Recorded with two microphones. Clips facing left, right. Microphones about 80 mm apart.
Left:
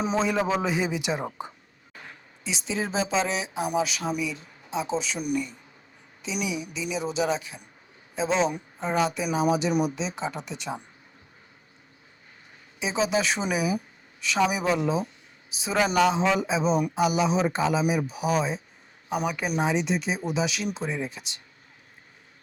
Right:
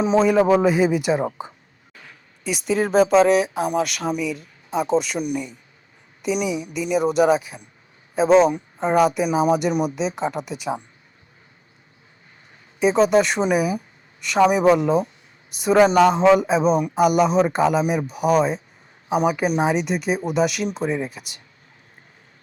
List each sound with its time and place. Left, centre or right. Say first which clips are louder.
0.2 s speech: right 10 dB; right
2.9 s speech: right 12 dB; right
3.2 s speech: right 10 dB; centre
4.7 s speech: right 7 dB; right
5.2 s a man's voice: right 5 dB; right
6.2 s speech: right 7 dB; right
12.8 s speech: right 9 dB; right